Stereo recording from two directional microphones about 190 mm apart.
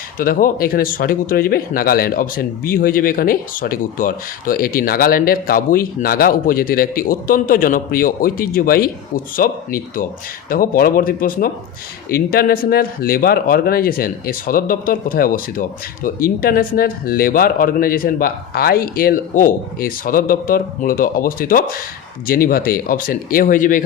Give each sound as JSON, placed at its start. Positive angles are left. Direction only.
{"t": 0.2, "sound": "speech", "side_deg": 45}